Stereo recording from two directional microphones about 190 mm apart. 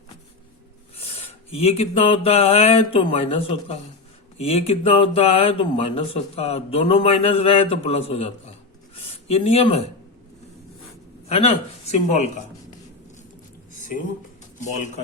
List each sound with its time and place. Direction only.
0.9 s a sound: 30° left (ahead or behind)
4.4 s speech: 30° left (ahead or behind)
11.3 s speech: 35° left (ahead or behind)
14.6 s speech: 40° left (ahead or behind)